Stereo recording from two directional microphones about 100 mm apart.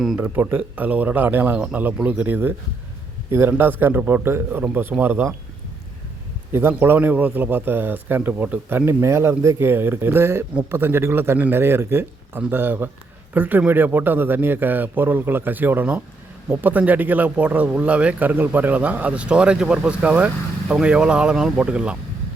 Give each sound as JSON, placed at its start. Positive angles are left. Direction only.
{"t": 0.2, "sound": "a man's voice", "side_deg": -20}
{"t": 6.5, "sound": "a man's voice", "side_deg": -25}